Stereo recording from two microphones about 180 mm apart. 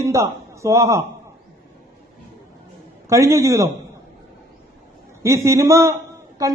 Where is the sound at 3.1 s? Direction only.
15° right (ahead or behind).